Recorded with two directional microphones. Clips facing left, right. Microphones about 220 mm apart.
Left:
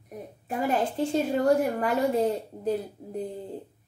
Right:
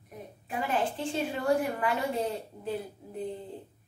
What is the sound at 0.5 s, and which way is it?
Speech, 40° left (ahead or behind).